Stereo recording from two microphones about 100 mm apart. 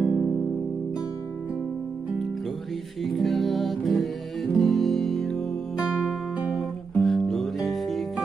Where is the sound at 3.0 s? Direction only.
Centre (ahead or behind).